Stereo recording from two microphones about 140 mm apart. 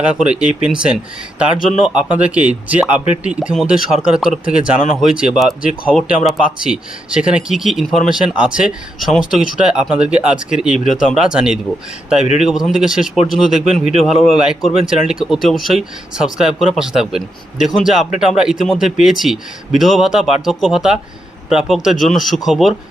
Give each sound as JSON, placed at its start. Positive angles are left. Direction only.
{"t": 0.0, "sound": "speech", "side_deg": -5}
{"t": 10.8, "sound": "speech", "side_deg": 65}
{"t": 11.2, "sound": "speech", "side_deg": -5}